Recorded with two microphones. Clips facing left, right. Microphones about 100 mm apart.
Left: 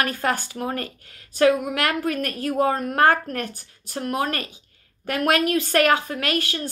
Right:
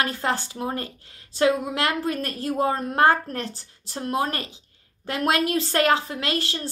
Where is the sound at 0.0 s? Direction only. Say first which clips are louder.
Left 1 dB; 25° right (ahead or behind).